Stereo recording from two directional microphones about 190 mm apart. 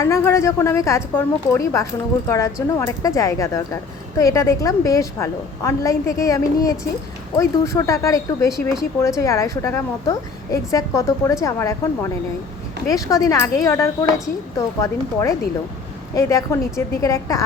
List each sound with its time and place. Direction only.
0.0 s a woman's voice: 15° left (ahead or behind)
12.9 s a woman's voice: 15° left (ahead or behind)
16.1 s a woman's voice: 15° left (ahead or behind)